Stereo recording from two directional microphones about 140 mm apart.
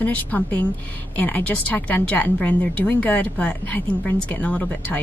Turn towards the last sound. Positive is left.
turn(degrees=10)  # may be behind; listen again after turning